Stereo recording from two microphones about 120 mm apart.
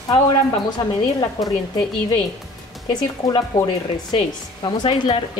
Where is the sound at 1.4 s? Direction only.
35° left (ahead or behind).